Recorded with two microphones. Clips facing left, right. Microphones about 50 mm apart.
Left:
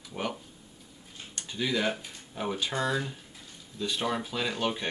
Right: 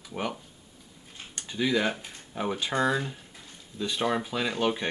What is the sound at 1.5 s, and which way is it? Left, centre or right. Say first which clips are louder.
Speech: right 3 dB; centre.